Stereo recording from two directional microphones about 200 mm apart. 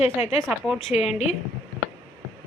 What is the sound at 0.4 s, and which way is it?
Speech, 5° right (ahead or behind).